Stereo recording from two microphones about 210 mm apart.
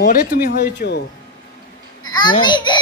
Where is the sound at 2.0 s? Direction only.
20° left (ahead or behind).